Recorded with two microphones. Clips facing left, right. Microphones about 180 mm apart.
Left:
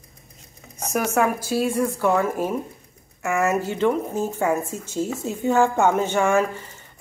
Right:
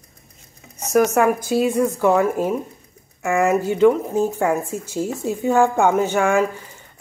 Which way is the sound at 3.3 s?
15° right (ahead or behind).